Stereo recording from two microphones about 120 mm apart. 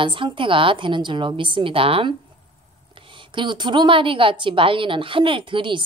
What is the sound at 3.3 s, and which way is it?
A woman's voice, 40° right (ahead or behind).